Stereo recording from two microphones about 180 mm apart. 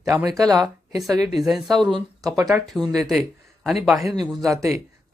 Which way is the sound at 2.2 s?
20° right (ahead or behind).